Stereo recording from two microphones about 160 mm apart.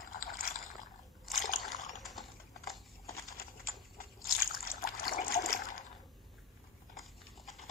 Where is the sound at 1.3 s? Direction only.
55° left (ahead or behind).